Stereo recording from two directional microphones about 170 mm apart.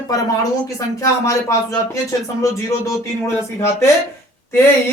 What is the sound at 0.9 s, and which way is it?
Speech, 20° left (ahead or behind).